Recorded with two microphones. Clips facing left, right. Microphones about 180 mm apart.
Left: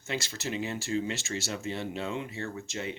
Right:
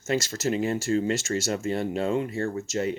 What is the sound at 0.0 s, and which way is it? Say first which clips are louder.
Speech: right 9 dB; 45° right (ahead or behind).